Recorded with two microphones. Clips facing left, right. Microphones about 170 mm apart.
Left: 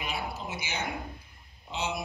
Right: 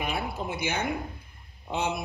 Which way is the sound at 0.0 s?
55° right (ahead or behind).